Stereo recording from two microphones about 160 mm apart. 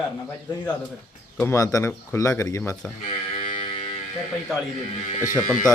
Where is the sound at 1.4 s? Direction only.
15° left (ahead or behind).